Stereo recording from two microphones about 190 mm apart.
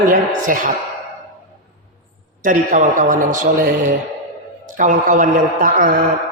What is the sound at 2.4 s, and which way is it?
A man's voice, 45° right (ahead or behind).